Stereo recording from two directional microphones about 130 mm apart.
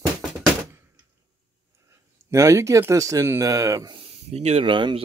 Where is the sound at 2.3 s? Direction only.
20° right (ahead or behind).